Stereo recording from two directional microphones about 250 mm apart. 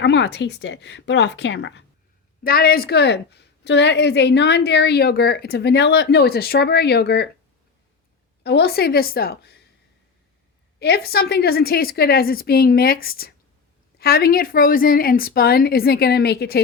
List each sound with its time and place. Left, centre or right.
0.0 s a woman's voice: left
8.4 s a woman's voice: left
10.8 s a woman's voice: left